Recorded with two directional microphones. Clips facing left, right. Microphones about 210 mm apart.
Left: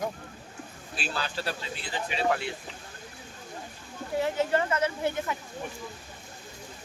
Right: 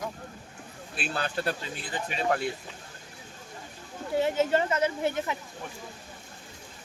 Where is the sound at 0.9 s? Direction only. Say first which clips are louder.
Right 2 dB; 55° right (ahead or behind).